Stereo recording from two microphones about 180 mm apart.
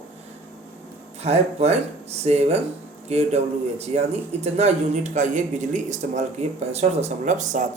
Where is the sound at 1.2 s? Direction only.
35° right (ahead or behind).